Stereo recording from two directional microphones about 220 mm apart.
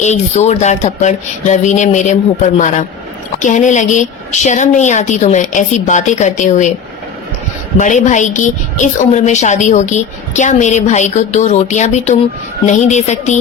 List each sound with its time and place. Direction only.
0.0 s a woman's voice: 30° left (ahead or behind)
7.8 s a woman's voice: 35° left (ahead or behind)